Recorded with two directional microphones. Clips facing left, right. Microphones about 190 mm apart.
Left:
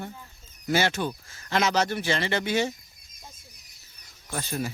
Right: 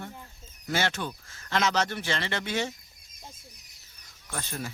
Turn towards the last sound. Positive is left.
turn(degrees=10)  # may be behind; listen again after turning